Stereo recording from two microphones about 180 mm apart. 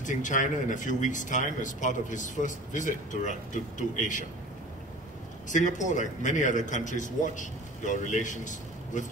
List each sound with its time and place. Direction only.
0.0 s speech: 45° left (ahead or behind)
5.5 s speech: 45° left (ahead or behind)